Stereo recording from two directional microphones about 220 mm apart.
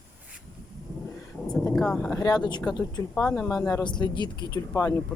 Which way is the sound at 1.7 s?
5° left (ahead or behind).